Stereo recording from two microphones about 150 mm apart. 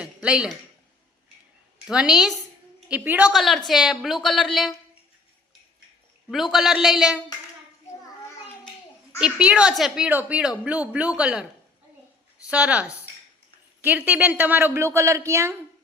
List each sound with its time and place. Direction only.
0.0 s a sound: 5° right (ahead or behind)
1.9 s a woman's voice: 5° right (ahead or behind)
3.3 s a woman's voice: centre (ahead or behind)
6.2 s a woman's voice: centre (ahead or behind)
9.1 s a woman's voice: 10° right (ahead or behind)
12.5 s a woman's voice: 10° right (ahead or behind)